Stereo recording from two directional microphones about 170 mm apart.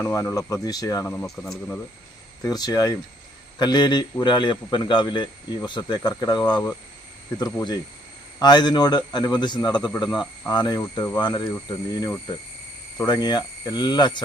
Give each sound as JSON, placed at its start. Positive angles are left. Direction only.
{"t": 0.0, "sound": "a man's voice", "side_deg": 20}
{"t": 2.4, "sound": "a man's voice", "side_deg": 20}
{"t": 13.1, "sound": "a man's voice", "side_deg": 25}